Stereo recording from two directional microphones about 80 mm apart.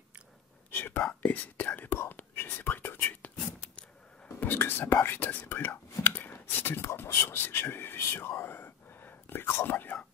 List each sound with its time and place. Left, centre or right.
0.7 s whispering: left
4.4 s speech: left
4.9 s whispering: left